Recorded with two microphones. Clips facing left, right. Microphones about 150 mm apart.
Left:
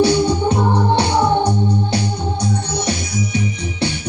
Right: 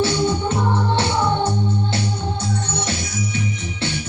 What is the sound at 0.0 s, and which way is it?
Organ, 15° left (ahead or behind).